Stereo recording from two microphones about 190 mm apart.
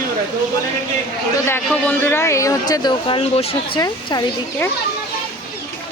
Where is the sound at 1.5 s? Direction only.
10° left (ahead or behind).